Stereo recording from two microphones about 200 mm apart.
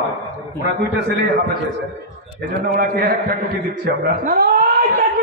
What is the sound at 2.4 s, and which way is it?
Speech, 45° right (ahead or behind).